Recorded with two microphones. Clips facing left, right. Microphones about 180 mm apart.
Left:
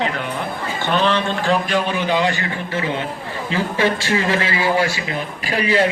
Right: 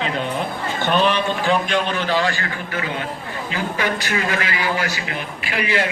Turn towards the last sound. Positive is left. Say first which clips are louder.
# left 4 dB
turn(degrees=35)  # may be behind; listen again after turning